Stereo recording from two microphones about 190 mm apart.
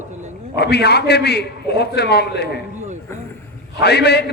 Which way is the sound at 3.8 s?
60° left (ahead or behind).